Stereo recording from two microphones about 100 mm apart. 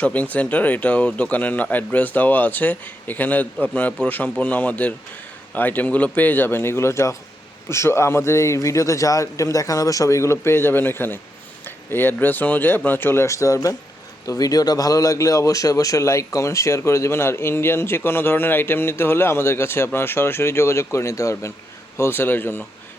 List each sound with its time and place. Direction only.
0.0 s speech: 15° left (ahead or behind)